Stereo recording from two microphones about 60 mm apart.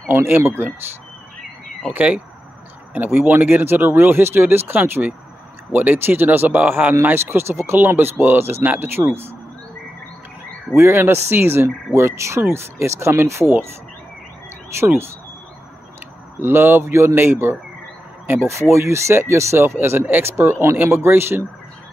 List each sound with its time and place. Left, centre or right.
0.0 s speech: right
1.9 s speech: centre
2.9 s speech: right
7.2 s speech: right
10.8 s speech: right
14.8 s speech: right
16.3 s speech: right
17.1 s speech: right